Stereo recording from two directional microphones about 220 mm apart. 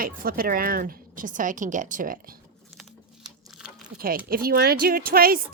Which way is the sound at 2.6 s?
Centre (ahead or behind).